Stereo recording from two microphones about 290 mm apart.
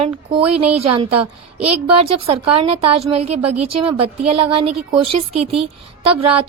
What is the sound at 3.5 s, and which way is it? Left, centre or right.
Speech, right.